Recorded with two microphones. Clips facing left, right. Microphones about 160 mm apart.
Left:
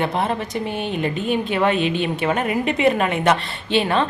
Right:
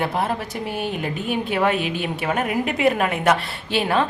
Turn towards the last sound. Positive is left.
turn(degrees=-5)  # may be behind; listen again after turning